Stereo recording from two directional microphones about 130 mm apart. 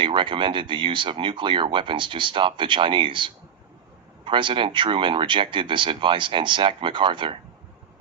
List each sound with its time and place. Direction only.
0.0 s speech: 40° right (ahead or behind)